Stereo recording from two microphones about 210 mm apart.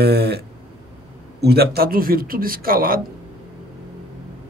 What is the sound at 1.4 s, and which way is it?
A man's voice, 50° right (ahead or behind).